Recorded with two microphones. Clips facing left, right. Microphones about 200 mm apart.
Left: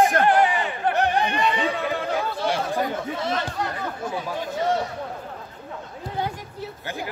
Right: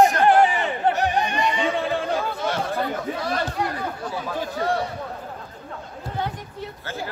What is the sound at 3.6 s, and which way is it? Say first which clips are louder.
Chatter: right 2 dB; 10° right (ahead or behind).